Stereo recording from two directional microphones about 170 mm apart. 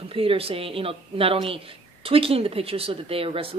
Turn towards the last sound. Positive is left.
turn(degrees=-30)  # may be behind; listen again after turning